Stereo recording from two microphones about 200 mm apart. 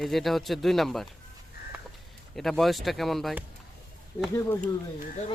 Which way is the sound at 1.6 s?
50° left (ahead or behind).